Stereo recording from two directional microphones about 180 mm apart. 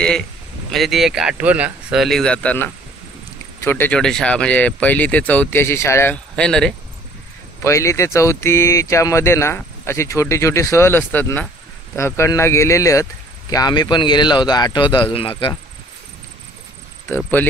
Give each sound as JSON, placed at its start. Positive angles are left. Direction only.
{"t": 0.7, "sound": "speech", "side_deg": 0}
{"t": 7.6, "sound": "speech", "side_deg": 15}
{"t": 17.1, "sound": "speech", "side_deg": 10}